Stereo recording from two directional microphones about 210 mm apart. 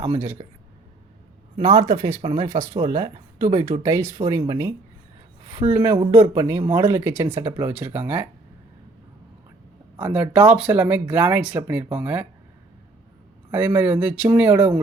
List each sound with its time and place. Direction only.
0.0 s speech: 15° right (ahead or behind)
1.5 s speech: 20° right (ahead or behind)
10.0 s speech: 5° right (ahead or behind)
13.5 s speech: 10° right (ahead or behind)